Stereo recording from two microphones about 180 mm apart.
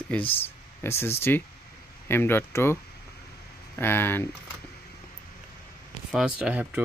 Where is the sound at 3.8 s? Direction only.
10° left (ahead or behind).